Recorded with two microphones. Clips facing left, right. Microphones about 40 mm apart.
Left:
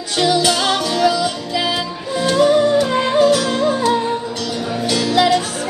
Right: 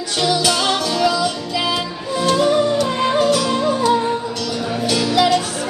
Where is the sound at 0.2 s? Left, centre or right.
Left.